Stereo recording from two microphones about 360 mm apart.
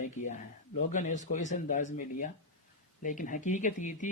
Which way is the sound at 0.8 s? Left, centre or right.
Centre.